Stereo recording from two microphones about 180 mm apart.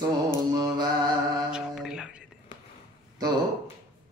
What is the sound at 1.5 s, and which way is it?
Mantra, 5° right (ahead or behind).